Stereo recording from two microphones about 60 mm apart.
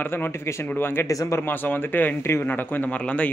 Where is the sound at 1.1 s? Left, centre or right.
Left.